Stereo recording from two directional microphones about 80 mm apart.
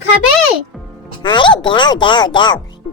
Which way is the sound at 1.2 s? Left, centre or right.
Left.